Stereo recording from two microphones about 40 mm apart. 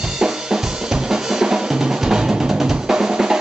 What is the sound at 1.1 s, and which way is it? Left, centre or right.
Drum, centre.